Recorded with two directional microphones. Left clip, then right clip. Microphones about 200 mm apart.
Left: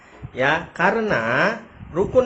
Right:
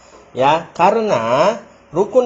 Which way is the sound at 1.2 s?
20° left (ahead or behind).